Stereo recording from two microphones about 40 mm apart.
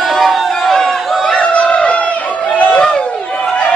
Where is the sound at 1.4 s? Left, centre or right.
Left.